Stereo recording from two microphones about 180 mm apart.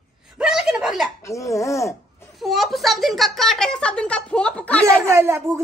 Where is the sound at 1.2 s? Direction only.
15° left (ahead or behind).